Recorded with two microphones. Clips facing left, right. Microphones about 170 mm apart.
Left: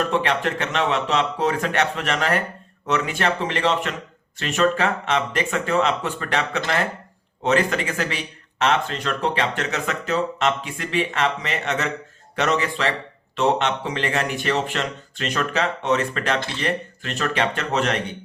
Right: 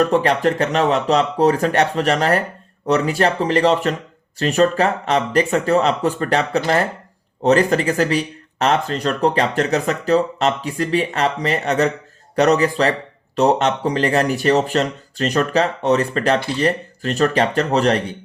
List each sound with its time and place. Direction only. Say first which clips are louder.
0.0 s speech: right 6 dB; 40° right (ahead or behind)